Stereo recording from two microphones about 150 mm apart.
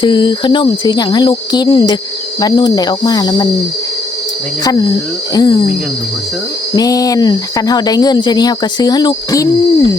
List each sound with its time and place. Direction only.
0.0 s speech: 30° left (ahead or behind)
4.6 s speech: 25° left (ahead or behind)
6.7 s speech: 25° left (ahead or behind)